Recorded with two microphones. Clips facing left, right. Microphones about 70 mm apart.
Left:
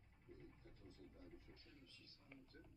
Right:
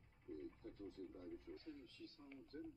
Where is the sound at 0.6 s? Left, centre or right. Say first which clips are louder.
Right 10 dB; right.